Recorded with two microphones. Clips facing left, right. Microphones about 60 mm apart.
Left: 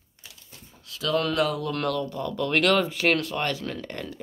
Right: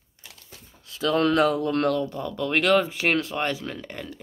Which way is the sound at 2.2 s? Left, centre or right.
Centre.